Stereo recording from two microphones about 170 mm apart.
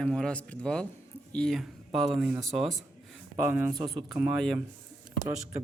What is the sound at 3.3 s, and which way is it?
Speech, 10° right (ahead or behind).